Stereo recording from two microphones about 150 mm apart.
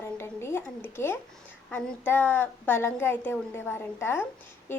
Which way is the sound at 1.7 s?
15° left (ahead or behind).